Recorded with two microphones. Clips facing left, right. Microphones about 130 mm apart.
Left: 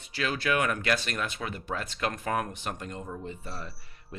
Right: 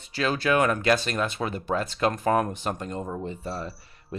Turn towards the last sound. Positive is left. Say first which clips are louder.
# right 6 dB
turn(degrees=-35)  # may be behind; listen again after turning